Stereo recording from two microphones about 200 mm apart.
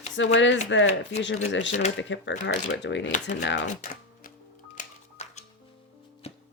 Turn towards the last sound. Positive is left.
turn(degrees=35)  # may be behind; listen again after turning